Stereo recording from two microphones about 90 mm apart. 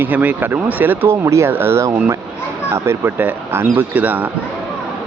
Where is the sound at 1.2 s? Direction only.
30° right (ahead or behind).